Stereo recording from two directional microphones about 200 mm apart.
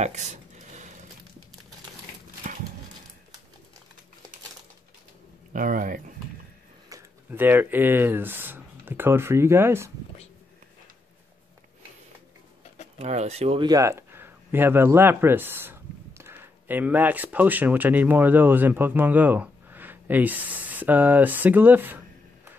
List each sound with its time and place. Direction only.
0.0 s a sound: 35° right (ahead or behind)
5.5 s speech: 45° right (ahead or behind)
6.9 s speech: 10° right (ahead or behind)
13.0 s speech: 35° right (ahead or behind); by 22.5 s 10° right (ahead or behind)